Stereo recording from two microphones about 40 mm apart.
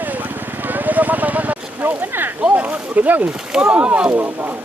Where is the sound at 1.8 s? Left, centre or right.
Right.